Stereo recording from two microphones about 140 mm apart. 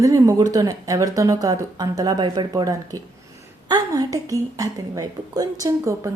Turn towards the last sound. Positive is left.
turn(degrees=-25)  # may be behind; listen again after turning